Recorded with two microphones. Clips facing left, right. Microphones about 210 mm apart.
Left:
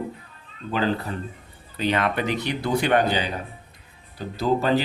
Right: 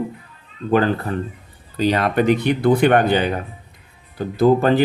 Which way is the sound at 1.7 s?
40° right (ahead or behind).